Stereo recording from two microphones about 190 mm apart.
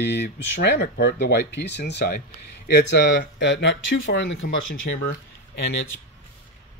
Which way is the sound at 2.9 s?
65° left (ahead or behind).